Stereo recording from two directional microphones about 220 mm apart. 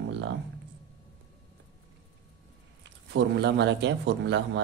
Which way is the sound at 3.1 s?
50° right (ahead or behind).